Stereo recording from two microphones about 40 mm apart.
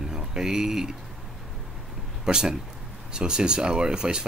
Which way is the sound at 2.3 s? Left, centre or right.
Centre.